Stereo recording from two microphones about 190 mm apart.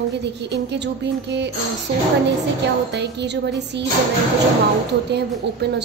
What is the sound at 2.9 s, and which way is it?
Speech, 65° right (ahead or behind).